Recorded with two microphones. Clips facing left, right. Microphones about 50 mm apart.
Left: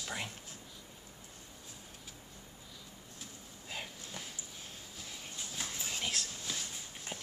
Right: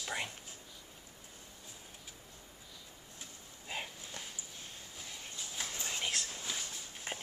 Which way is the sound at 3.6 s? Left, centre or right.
Centre.